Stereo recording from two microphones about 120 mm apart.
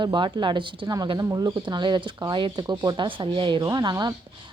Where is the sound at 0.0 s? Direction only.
40° right (ahead or behind).